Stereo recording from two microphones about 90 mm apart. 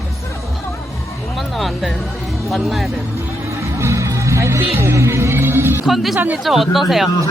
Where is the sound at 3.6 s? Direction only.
35° right (ahead or behind).